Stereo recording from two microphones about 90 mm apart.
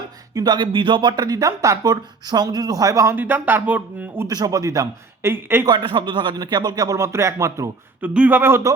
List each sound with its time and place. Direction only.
0.3 s speech: 50° right (ahead or behind)
3.2 s speech: 20° right (ahead or behind)
4.3 s speech: 45° right (ahead or behind)
5.3 s speech: 25° right (ahead or behind)
5.6 s speech: 60° right (ahead or behind); by 7.7 s 35° right (ahead or behind)
8.0 s speech: 15° right (ahead or behind)